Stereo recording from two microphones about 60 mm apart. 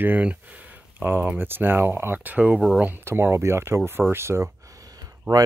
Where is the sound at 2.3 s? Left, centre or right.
Right.